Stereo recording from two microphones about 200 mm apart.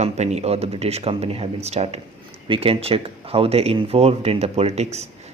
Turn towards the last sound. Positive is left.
turn(degrees=-35)  # may be behind; listen again after turning